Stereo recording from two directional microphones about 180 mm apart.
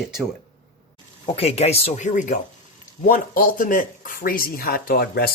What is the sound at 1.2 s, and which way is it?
Speech, 35° left (ahead or behind).